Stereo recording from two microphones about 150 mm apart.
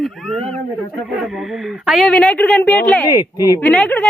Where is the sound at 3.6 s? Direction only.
10° left (ahead or behind).